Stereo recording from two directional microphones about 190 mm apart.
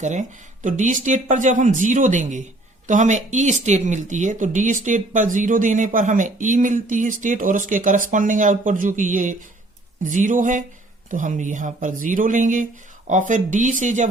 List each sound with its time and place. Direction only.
0.0 s speech: 40° right (ahead or behind)